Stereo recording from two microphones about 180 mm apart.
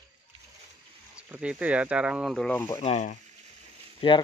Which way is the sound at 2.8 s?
40° left (ahead or behind).